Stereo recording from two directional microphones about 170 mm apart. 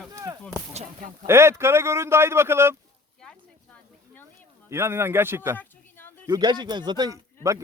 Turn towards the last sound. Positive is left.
turn(degrees=-20)  # may be behind; listen again after turning